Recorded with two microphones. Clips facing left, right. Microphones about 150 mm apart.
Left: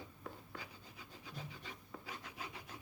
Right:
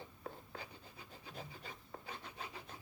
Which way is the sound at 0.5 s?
30° right (ahead or behind).